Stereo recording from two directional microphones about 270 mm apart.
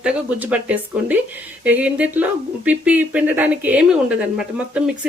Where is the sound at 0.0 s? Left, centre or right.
Centre.